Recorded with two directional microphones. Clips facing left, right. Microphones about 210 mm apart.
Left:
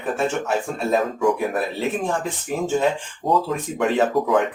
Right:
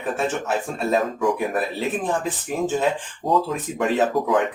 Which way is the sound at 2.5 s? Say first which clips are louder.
Left 1 dB; centre (ahead or behind).